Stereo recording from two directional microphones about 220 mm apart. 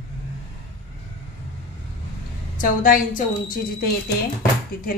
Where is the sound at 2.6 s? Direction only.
40° left (ahead or behind).